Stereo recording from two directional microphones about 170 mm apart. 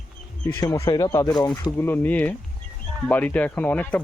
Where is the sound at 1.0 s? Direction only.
20° left (ahead or behind).